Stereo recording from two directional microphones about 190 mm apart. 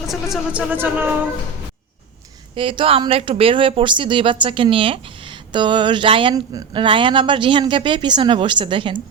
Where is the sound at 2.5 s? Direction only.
30° right (ahead or behind).